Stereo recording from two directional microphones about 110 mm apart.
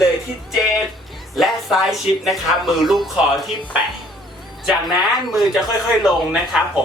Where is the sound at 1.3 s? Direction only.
Centre (ahead or behind).